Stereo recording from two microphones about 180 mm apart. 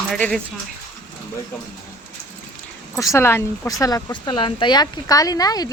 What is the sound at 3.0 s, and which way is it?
Speech, 15° left (ahead or behind).